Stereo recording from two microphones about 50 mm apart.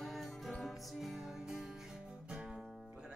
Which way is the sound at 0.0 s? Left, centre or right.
Centre.